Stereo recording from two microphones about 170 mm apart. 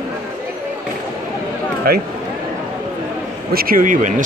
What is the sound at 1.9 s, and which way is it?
Speech, 65° right (ahead or behind).